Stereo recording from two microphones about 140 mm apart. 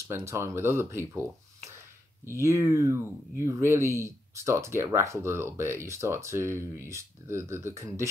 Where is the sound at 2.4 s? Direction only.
20° right (ahead or behind).